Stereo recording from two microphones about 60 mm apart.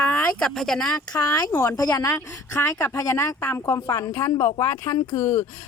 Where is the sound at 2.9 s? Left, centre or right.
Left.